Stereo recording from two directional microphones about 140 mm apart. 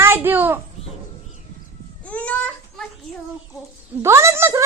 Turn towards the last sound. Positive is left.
turn(degrees=-20)  # may be behind; listen again after turning